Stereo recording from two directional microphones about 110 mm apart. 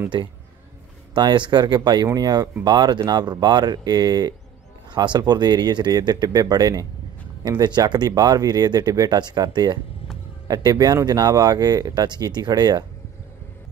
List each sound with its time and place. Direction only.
1.1 s speech: 45° right (ahead or behind)